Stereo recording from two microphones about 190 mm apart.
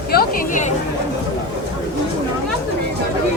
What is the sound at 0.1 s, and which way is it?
Chatter, 50° left (ahead or behind).